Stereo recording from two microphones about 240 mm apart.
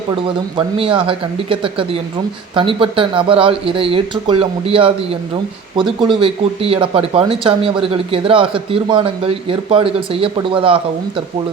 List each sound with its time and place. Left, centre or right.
0.5 s speech: right